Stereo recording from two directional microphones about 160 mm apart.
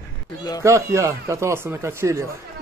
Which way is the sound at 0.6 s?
20° right (ahead or behind).